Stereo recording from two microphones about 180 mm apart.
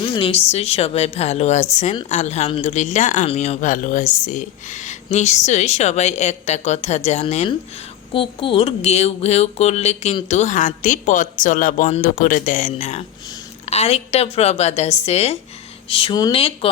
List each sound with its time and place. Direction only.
0.0 s speech: 30° left (ahead or behind)